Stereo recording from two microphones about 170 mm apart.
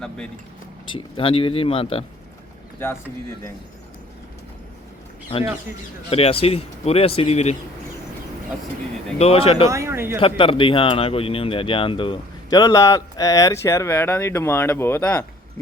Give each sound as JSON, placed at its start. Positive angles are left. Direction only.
{"t": 0.9, "sound": "speech", "side_deg": 30}
{"t": 2.7, "sound": "speech", "side_deg": 15}
{"t": 6.1, "sound": "speech", "side_deg": 35}
{"t": 9.1, "sound": "speech", "side_deg": 35}
{"t": 9.6, "sound": "speech", "side_deg": -15}
{"t": 10.2, "sound": "speech", "side_deg": 30}